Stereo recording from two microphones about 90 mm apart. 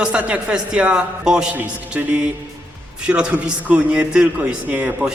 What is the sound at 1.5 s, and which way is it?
Speech, 20° right (ahead or behind).